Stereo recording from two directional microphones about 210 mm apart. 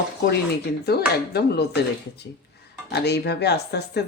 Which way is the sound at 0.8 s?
50° left (ahead or behind).